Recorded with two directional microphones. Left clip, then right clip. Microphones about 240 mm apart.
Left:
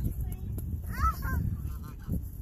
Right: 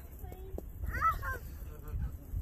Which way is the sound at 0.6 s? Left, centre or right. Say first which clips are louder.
Even; left.